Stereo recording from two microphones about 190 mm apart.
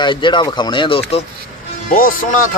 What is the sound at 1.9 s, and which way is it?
Speech, 45° left (ahead or behind).